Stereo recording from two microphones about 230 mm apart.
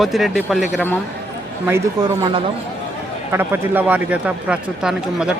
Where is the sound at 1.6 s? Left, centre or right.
Centre.